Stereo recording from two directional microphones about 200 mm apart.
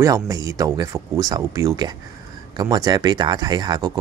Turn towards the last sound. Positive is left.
turn(degrees=-20)  # may be behind; listen again after turning